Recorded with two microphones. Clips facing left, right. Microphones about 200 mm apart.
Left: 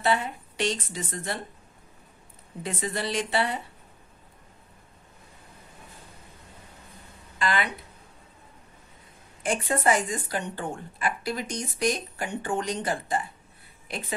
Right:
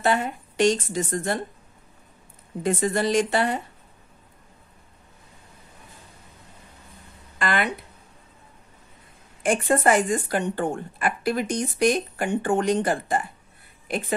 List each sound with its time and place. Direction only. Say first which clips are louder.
0.0 s a woman's voice: right 3 dB; 50° right (ahead or behind)
2.6 s a woman's voice: right 8 dB; 45° right (ahead or behind)
7.3 s speech: right 3 dB; 55° right (ahead or behind)
9.4 s speech: right 6 dB; 55° right (ahead or behind)